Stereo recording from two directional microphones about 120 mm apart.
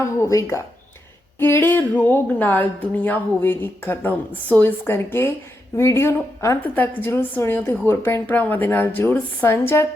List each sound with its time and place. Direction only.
0.0 s a woman's voice: 25° left (ahead or behind)